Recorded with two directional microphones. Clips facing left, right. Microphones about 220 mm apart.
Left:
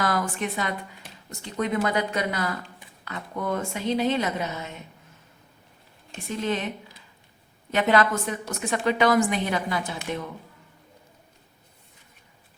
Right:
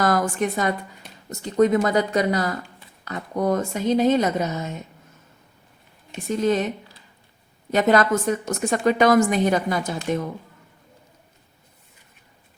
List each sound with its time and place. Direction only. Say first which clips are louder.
0.0 s a woman's voice: right 5 dB; 45° right (ahead or behind)
6.2 s a woman's voice: right 7 dB; 45° right (ahead or behind)
7.7 s a woman's voice: right 4 dB; 40° right (ahead or behind)